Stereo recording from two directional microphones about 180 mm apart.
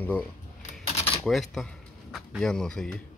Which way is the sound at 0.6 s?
35° left (ahead or behind).